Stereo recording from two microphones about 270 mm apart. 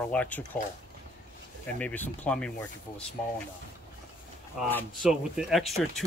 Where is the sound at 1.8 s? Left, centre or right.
Centre.